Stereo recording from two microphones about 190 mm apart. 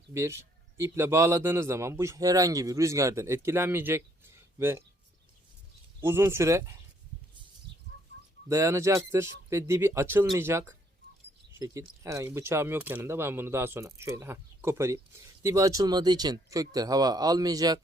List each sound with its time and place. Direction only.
0.1 s a man's voice: 15° right (ahead or behind)
6.0 s a man's voice: 10° right (ahead or behind)
8.4 s a man's voice: 15° right (ahead or behind)